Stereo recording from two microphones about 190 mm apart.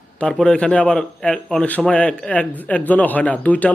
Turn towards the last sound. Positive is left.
turn(degrees=10)  # may be behind; listen again after turning